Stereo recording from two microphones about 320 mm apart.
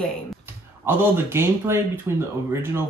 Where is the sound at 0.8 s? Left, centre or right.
Centre.